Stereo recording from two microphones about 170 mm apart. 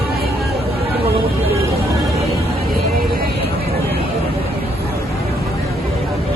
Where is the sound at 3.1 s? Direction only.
65° right (ahead or behind).